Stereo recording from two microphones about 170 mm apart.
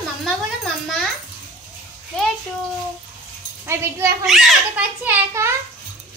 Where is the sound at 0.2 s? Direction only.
Centre (ahead or behind).